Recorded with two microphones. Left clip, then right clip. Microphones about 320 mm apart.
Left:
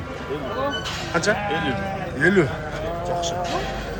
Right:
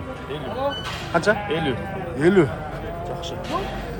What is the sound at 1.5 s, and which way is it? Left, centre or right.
Speech, right.